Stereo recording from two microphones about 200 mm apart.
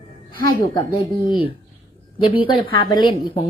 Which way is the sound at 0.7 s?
20° left (ahead or behind).